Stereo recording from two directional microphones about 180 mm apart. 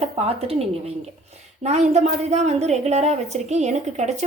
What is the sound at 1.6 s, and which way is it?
Speech, 40° right (ahead or behind).